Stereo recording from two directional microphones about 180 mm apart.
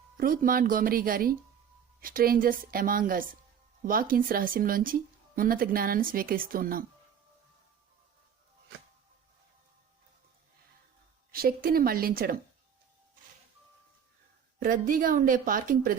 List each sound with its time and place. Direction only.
0.2 s a woman's voice: 50° right (ahead or behind)
11.3 s a woman's voice: 55° right (ahead or behind)
14.6 s a woman's voice: 50° right (ahead or behind)